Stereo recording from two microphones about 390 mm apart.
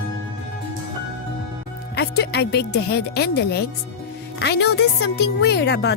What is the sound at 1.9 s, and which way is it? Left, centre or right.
A woman's voice, left.